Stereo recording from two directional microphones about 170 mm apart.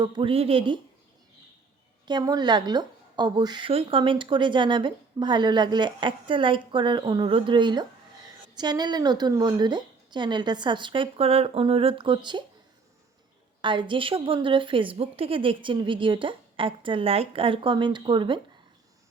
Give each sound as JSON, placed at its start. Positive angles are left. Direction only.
{"t": 0.0, "sound": "a woman's voice", "side_deg": -30}
{"t": 2.0, "sound": "a woman's voice", "side_deg": -25}
{"t": 13.6, "sound": "a woman's voice", "side_deg": -30}